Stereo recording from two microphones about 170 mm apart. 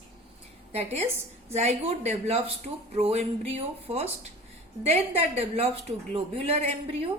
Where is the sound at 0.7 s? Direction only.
40° right (ahead or behind).